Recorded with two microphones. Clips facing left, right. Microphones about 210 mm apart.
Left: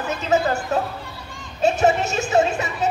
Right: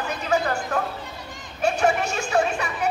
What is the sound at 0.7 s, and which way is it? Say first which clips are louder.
Speech: left 3 dB; 25° left (ahead or behind).